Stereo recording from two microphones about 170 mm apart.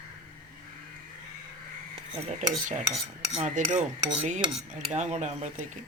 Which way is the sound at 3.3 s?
45° right (ahead or behind).